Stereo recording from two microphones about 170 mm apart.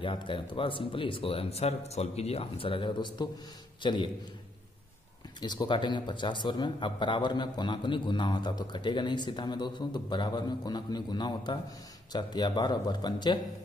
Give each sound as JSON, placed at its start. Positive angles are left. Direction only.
{"t": 0.0, "sound": "a man's voice", "side_deg": 30}
{"t": 5.4, "sound": "a man's voice", "side_deg": 25}